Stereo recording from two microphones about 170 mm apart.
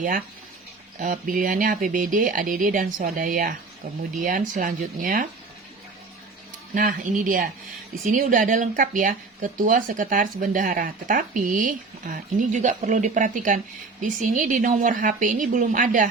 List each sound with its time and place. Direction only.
0.9 s speech: 50° right (ahead or behind)
6.7 s speech: 55° right (ahead or behind)